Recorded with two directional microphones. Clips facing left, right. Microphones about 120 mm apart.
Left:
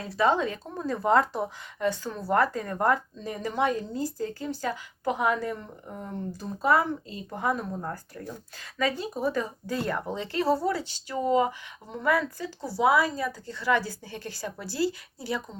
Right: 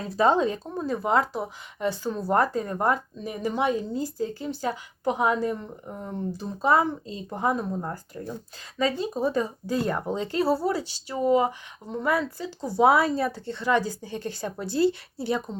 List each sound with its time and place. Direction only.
0.2 s speech: 30° right (ahead or behind)
0.7 s speech: 15° right (ahead or behind)
1.8 s speech: 20° right (ahead or behind)
12.7 s speech: 55° right (ahead or behind)
13.2 s speech: 30° right (ahead or behind)
13.8 s speech: 15° right (ahead or behind)
14.2 s speech: 40° right (ahead or behind)